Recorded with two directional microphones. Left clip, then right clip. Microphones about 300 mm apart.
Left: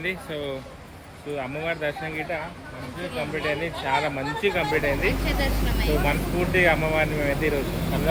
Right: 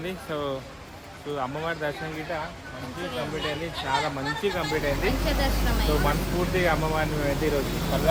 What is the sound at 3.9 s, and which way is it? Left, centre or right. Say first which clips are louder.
Speech: left 2 dB; centre.